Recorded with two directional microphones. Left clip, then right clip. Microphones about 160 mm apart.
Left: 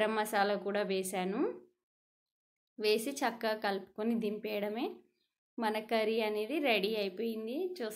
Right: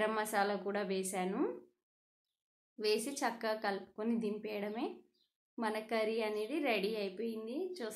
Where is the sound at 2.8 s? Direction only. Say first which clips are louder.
Left 3 dB; 30° left (ahead or behind).